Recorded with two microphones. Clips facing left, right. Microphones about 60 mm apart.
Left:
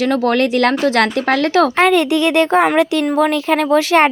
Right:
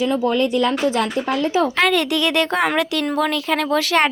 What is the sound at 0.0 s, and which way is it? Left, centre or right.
Speech, left.